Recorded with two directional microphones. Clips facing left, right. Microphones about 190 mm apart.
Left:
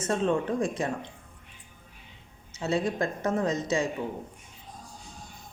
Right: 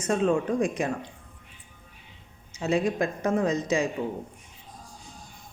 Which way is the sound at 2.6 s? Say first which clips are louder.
Right 2 dB; 20° right (ahead or behind).